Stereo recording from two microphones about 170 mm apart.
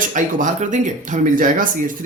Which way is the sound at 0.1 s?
45° right (ahead or behind).